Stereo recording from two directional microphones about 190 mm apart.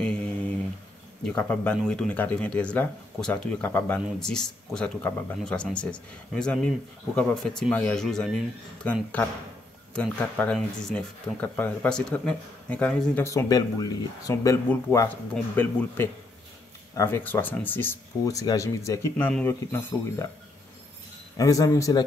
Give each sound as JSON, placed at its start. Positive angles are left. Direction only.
{"t": 1.2, "sound": "speech", "side_deg": 5}
{"t": 9.9, "sound": "speech", "side_deg": 5}
{"t": 21.4, "sound": "speech", "side_deg": 15}